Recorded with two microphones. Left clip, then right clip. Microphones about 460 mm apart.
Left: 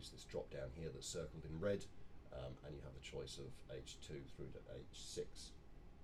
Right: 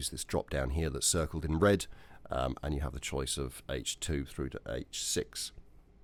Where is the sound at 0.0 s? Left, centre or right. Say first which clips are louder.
Right 14 dB; right.